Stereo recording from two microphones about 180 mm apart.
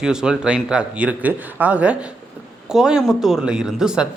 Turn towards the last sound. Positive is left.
turn(degrees=-5)  # may be behind; listen again after turning